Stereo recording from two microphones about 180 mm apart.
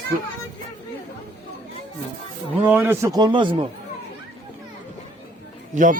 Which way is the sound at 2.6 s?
10° right (ahead or behind).